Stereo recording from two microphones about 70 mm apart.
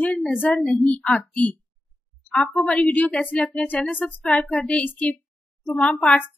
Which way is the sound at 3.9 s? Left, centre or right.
Left.